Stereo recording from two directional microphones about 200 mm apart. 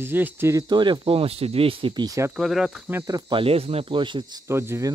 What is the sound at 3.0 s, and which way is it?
Speech, 20° right (ahead or behind).